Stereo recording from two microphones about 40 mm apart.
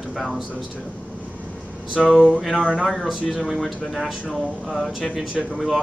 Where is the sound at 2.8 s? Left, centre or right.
Centre.